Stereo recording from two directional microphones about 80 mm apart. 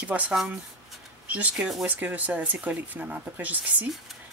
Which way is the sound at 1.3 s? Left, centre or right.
Centre.